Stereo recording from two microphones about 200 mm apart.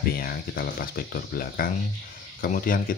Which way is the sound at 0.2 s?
50° left (ahead or behind).